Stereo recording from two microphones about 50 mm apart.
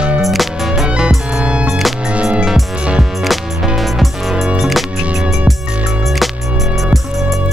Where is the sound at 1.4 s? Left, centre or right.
Right.